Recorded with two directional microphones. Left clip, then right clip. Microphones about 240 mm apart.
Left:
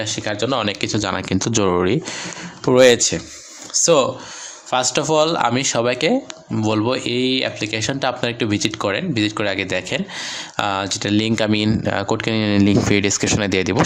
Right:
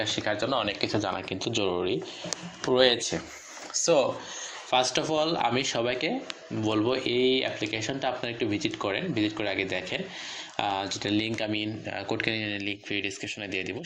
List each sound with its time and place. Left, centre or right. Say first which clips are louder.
0.0 s speech: left 5 dB; centre
0.3 s speech: left 7 dB; left